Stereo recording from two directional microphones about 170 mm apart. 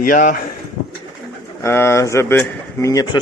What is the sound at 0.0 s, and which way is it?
Speech, 55° left (ahead or behind).